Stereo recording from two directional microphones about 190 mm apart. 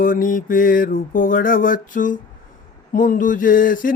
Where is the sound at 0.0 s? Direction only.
45° left (ahead or behind).